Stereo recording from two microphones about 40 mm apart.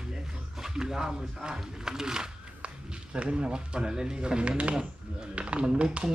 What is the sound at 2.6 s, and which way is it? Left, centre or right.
A man's voice, right.